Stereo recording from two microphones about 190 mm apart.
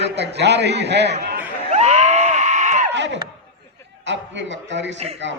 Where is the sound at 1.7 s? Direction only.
35° right (ahead or behind).